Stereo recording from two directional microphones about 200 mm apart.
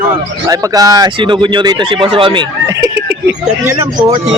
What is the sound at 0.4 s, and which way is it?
Speech, 15° right (ahead or behind).